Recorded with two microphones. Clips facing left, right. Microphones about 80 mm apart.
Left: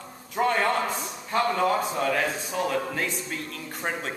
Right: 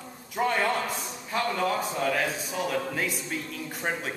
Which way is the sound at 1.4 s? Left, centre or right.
Centre.